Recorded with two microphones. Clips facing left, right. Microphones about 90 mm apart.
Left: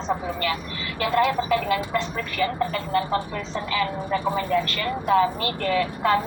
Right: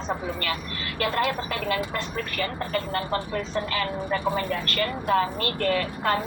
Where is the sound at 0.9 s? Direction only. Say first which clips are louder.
Left 4 dB; 45° right (ahead or behind).